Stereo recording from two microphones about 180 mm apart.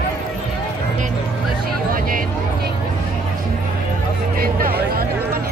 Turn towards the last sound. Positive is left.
turn(degrees=-55)  # may be behind; listen again after turning